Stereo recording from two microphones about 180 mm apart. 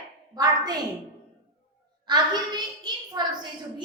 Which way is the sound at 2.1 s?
25° right (ahead or behind).